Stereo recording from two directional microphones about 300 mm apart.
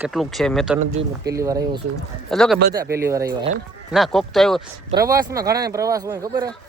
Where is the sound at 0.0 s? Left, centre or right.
Centre.